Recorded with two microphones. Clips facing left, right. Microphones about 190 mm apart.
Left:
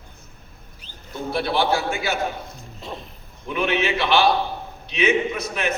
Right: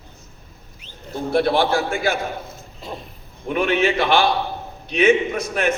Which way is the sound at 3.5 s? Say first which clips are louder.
Right 3 dB; 50° right (ahead or behind).